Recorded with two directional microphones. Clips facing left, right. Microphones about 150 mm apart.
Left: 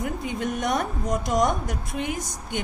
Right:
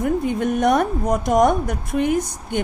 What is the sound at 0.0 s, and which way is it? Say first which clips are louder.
A woman's voice: right 8 dB; 50° right (ahead or behind).